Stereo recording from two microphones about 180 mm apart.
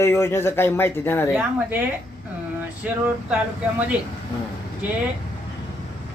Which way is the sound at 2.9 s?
10° right (ahead or behind).